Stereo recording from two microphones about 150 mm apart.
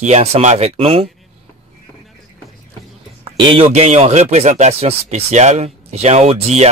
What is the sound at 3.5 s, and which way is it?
Speech, 40° right (ahead or behind).